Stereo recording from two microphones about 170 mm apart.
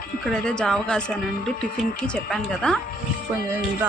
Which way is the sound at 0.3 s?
5° left (ahead or behind).